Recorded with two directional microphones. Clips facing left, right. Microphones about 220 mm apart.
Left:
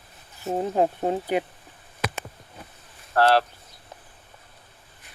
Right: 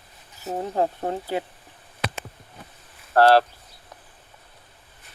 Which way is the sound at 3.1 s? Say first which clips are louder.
Right 4 dB; 35° right (ahead or behind).